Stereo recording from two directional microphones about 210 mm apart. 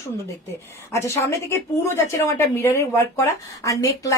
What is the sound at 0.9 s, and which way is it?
A woman's voice, 15° left (ahead or behind).